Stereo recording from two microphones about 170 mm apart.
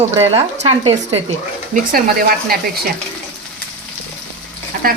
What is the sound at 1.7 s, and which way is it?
Speech, 55° right (ahead or behind).